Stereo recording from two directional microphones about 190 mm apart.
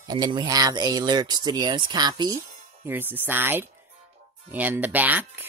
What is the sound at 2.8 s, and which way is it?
Speech, 10° right (ahead or behind).